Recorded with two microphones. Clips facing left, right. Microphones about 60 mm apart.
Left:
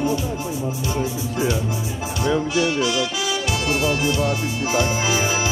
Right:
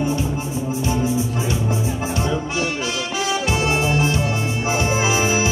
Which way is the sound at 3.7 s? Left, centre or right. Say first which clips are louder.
Left 2 dB; right.